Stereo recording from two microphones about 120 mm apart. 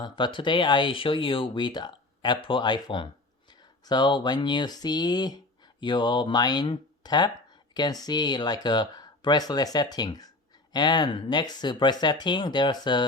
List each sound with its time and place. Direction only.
0.0 s speech: 40° left (ahead or behind)